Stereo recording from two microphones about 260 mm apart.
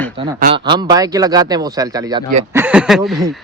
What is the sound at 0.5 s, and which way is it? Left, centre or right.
Speech, centre.